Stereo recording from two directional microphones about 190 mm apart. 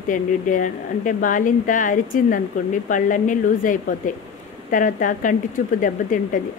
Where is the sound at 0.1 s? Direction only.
45° left (ahead or behind).